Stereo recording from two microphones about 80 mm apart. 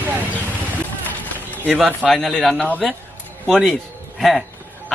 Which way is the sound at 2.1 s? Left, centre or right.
Centre.